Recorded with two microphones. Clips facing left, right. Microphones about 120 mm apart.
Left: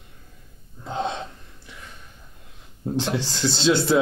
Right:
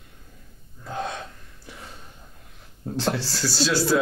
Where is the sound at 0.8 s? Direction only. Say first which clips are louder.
Left 3 dB; 25° left (ahead or behind).